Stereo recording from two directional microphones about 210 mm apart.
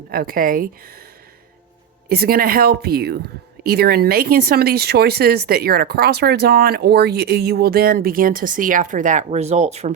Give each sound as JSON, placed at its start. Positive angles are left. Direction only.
{"t": 0.1, "sound": "speech", "side_deg": -45}
{"t": 2.0, "sound": "speech", "side_deg": -45}